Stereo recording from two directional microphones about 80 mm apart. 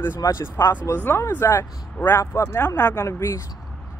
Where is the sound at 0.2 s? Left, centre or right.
Left.